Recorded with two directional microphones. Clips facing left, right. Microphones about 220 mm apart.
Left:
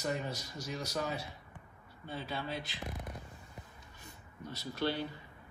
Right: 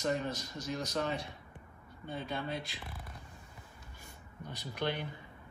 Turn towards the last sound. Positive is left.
turn(degrees=-15)  # may be behind; listen again after turning